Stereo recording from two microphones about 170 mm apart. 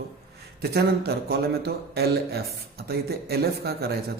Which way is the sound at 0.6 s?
70° right (ahead or behind).